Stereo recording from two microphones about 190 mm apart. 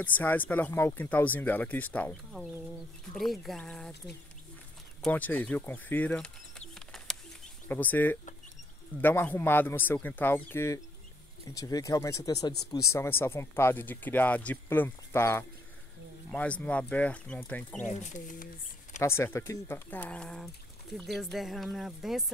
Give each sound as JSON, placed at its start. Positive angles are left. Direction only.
{"t": 0.0, "sound": "speech", "side_deg": 10}
{"t": 5.0, "sound": "speech", "side_deg": 10}
{"t": 6.7, "sound": "bird", "side_deg": 0}
{"t": 7.6, "sound": "speech", "side_deg": 10}
{"t": 17.8, "sound": "speech", "side_deg": 40}
{"t": 18.9, "sound": "speech", "side_deg": 15}